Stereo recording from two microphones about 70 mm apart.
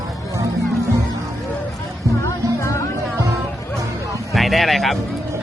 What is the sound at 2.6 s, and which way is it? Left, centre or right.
Music, left.